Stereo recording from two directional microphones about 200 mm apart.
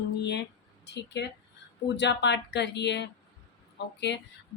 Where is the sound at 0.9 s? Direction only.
60° left (ahead or behind).